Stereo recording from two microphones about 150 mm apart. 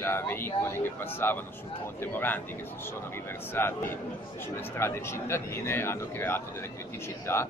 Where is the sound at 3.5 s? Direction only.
15° left (ahead or behind).